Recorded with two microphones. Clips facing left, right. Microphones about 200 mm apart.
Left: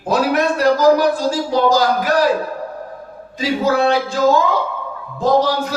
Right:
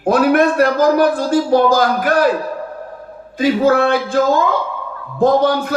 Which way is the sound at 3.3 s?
55° right (ahead or behind).